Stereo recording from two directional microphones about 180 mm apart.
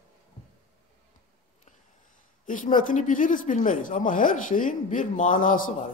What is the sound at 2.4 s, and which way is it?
Speech, 45° left (ahead or behind).